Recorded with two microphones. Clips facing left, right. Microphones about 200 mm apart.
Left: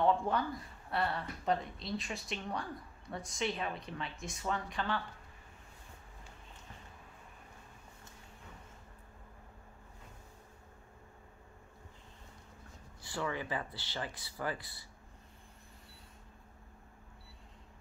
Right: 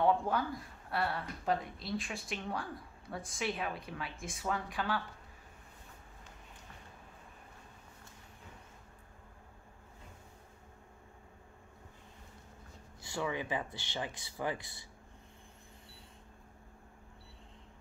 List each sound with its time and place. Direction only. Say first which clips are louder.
0.0 s speech: even; 5° right (ahead or behind)
13.0 s speech: right 1 dB; 15° right (ahead or behind)